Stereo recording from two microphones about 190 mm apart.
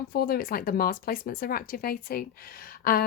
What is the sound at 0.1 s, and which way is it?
Speech, 55° left (ahead or behind).